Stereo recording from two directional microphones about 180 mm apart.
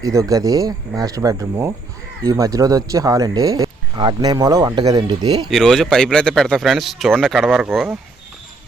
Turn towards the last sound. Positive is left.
turn(degrees=-5)  # may be behind; listen again after turning